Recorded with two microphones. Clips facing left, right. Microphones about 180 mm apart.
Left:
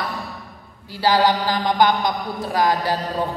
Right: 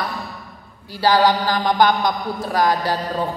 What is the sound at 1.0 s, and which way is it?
A man's voice, 20° left (ahead or behind).